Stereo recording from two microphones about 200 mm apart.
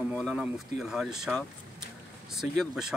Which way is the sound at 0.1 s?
Centre (ahead or behind).